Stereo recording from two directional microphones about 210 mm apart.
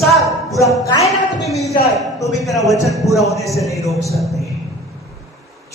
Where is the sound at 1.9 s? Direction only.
Centre (ahead or behind).